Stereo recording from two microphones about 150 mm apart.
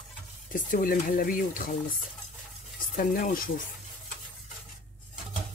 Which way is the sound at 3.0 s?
65° left (ahead or behind).